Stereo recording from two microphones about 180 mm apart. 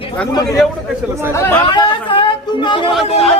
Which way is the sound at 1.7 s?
25° left (ahead or behind).